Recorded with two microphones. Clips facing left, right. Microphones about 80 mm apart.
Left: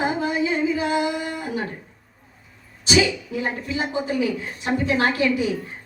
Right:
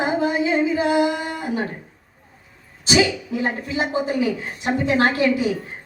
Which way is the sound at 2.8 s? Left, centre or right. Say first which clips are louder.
Right 1 dB; right.